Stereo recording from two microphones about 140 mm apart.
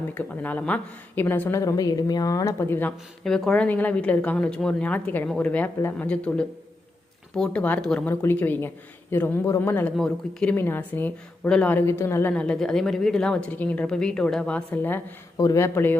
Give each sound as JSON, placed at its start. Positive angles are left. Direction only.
{"t": 0.1, "sound": "a woman's voice", "side_deg": 10}
{"t": 3.2, "sound": "a woman's voice", "side_deg": 5}
{"t": 8.1, "sound": "a woman's voice", "side_deg": 15}